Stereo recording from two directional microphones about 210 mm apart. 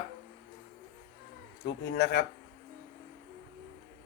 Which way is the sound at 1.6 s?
55° left (ahead or behind).